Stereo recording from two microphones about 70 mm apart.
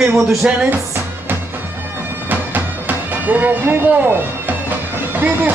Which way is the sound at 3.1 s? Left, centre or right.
Right.